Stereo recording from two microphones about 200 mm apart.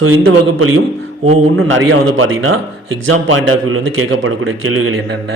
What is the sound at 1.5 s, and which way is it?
A man's voice, 80° right.